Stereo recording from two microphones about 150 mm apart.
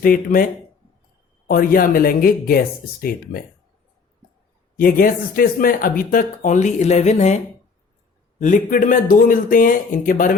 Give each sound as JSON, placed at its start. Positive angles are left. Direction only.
{"t": 0.0, "sound": "speech", "side_deg": 70}
{"t": 1.5, "sound": "speech", "side_deg": 75}
{"t": 4.8, "sound": "speech", "side_deg": 70}
{"t": 8.4, "sound": "speech", "side_deg": 60}